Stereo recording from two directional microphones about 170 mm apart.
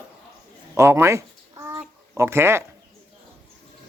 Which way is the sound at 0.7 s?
15° right (ahead or behind).